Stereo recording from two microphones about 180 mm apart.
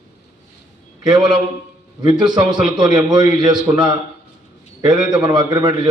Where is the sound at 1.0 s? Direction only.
25° right (ahead or behind).